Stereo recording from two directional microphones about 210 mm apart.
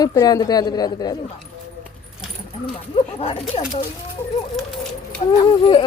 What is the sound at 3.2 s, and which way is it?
Speech, 30° left (ahead or behind).